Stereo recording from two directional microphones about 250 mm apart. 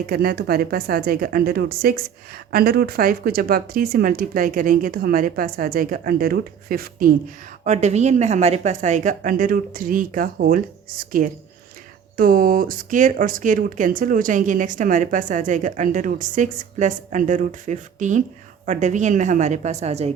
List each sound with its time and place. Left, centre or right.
0.1 s speech: right